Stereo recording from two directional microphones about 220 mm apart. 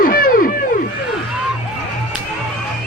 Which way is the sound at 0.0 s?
40° left (ahead or behind).